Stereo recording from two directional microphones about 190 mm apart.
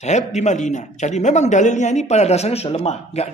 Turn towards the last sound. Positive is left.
turn(degrees=35)  # may be behind; listen again after turning